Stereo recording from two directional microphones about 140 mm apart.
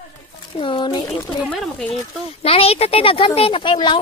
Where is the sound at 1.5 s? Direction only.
5° left (ahead or behind).